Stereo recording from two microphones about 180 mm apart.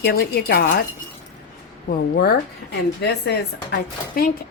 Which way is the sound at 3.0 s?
65° left (ahead or behind).